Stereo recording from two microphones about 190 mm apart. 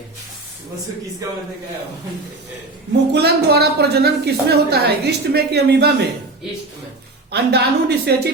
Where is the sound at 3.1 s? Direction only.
60° right (ahead or behind).